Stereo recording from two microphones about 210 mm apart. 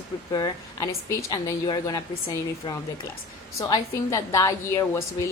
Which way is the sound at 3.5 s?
15° left (ahead or behind).